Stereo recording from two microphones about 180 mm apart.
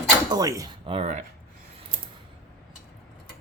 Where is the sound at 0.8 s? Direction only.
35° right (ahead or behind).